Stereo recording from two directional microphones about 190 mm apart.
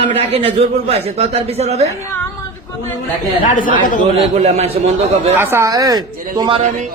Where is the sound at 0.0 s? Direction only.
35° right (ahead or behind).